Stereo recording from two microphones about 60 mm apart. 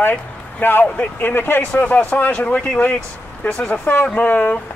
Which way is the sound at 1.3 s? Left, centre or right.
Left.